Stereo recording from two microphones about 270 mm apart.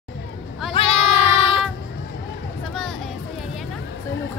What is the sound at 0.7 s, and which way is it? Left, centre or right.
Child singing, left.